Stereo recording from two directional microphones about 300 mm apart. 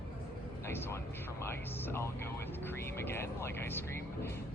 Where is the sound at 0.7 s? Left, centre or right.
Centre.